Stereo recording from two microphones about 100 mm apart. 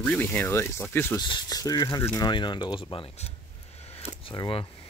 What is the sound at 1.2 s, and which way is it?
Speech, 45° left (ahead or behind).